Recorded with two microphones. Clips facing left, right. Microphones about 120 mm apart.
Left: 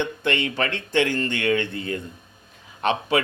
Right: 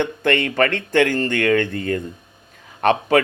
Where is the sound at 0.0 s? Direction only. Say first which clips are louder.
Right 5 dB; 50° right (ahead or behind).